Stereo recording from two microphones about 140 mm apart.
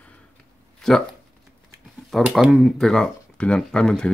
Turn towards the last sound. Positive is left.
turn(degrees=5)  # may be behind; listen again after turning